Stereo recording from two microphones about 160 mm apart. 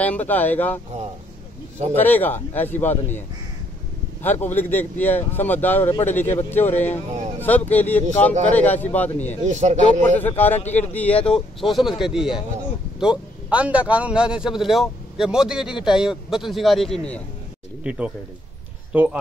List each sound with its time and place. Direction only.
0.0 s speech: 10° left (ahead or behind)
2.0 s speech: 10° left (ahead or behind)
4.2 s speech: 10° left (ahead or behind)
6.7 s speech: 45° left (ahead or behind)
7.3 s speech: 10° left (ahead or behind)
9.4 s speech: 45° right (ahead or behind)
10.0 s a man's voice: 10° left (ahead or behind)
17.8 s speech: 5° right (ahead or behind)